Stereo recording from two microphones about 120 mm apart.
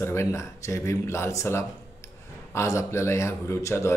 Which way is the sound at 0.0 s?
20° left (ahead or behind).